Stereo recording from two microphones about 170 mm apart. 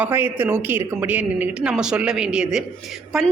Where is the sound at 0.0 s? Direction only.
10° right (ahead or behind).